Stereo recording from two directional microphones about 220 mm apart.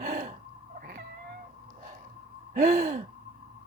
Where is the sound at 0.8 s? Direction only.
45° right (ahead or behind).